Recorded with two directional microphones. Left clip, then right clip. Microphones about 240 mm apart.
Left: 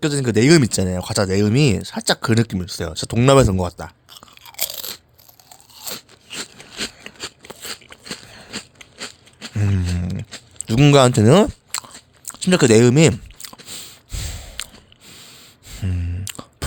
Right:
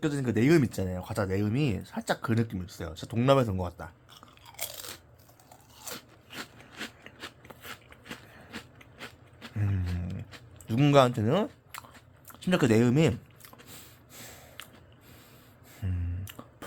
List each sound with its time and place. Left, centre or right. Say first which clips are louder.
0.0 s speech: left 10 dB; left
5.5 s crunch: left 10 dB; left